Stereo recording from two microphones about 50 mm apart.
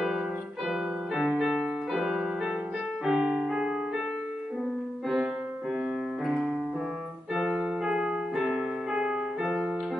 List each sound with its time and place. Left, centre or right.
0.7 s music: centre
3.1 s piano: centre
3.3 s music: centre
6.2 s piano: centre
7.5 s keyboard: centre
8.9 s piano: centre